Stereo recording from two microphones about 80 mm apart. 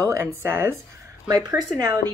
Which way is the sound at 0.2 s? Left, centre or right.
Right.